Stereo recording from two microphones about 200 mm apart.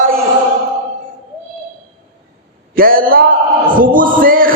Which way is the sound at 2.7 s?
45° right (ahead or behind).